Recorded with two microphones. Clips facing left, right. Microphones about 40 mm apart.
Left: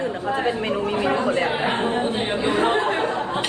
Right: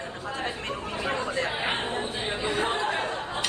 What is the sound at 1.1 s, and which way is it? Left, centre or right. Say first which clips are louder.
Speech: left 5 dB; left.